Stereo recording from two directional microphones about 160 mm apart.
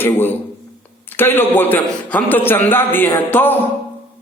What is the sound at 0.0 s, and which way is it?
A man's voice, 10° left (ahead or behind).